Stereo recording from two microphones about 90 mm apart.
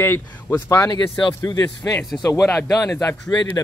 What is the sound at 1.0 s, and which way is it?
Speech, 65° left (ahead or behind).